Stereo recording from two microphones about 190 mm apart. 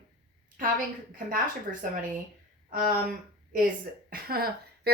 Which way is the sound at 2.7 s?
45° right (ahead or behind).